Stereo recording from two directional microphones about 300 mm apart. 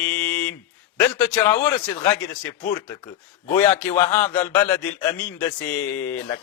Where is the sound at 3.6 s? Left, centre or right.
Centre.